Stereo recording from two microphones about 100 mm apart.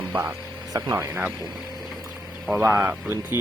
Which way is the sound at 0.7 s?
30° right (ahead or behind).